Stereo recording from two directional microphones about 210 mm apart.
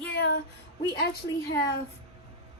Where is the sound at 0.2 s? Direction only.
50° left (ahead or behind).